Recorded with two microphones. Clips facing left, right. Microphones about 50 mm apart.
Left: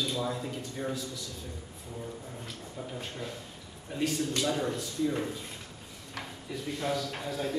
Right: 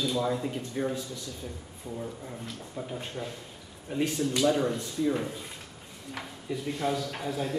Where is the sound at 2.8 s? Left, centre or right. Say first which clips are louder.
Right 3 dB; centre.